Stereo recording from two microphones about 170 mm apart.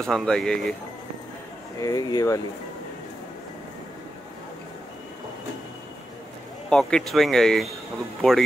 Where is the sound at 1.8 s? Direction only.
20° left (ahead or behind).